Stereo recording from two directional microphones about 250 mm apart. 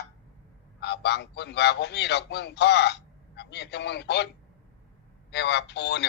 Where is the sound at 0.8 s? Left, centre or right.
Left.